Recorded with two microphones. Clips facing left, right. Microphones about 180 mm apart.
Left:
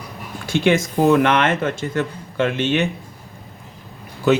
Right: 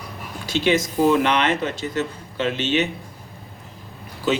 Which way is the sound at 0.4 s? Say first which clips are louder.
Left 3 dB; 50° left (ahead or behind).